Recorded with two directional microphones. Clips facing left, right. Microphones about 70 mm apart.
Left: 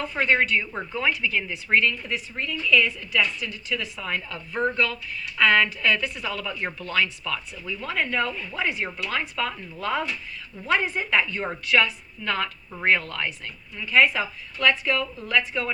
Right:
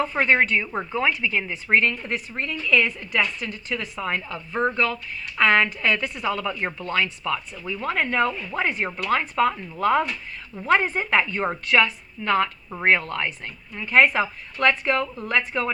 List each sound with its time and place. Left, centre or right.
0.0 s a woman's voice: right
13.8 s a woman's voice: right